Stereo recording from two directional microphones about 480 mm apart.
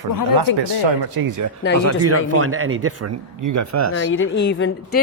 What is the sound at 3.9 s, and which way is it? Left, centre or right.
Speech, left.